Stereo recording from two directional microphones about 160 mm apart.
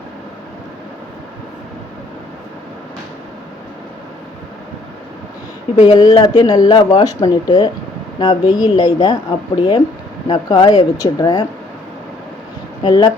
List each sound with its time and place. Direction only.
5.9 s speech: 25° left (ahead or behind)
12.8 s speech: 25° left (ahead or behind)